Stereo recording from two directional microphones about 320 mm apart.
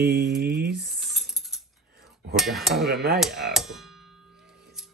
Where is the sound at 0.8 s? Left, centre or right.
Centre.